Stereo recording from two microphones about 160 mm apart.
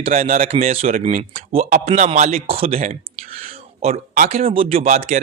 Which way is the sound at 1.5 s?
40° right (ahead or behind).